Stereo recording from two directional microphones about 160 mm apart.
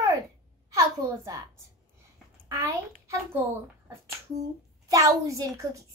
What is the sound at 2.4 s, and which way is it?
Speech, 20° right (ahead or behind).